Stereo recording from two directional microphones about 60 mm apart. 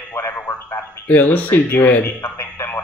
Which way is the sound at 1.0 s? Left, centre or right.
Left.